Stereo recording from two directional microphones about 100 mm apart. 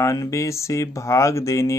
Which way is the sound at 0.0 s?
30° left (ahead or behind).